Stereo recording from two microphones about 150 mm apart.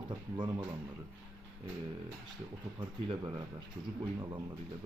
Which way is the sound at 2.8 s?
30° right (ahead or behind).